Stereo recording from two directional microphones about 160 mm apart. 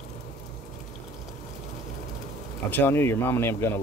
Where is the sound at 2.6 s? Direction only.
10° left (ahead or behind).